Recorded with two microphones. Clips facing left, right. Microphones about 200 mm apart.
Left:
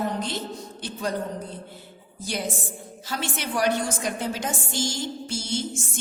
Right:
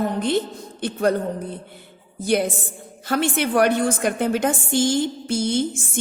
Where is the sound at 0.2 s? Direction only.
55° right (ahead or behind).